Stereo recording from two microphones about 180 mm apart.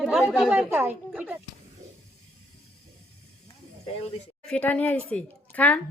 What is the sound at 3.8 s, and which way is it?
Speech, 35° left (ahead or behind).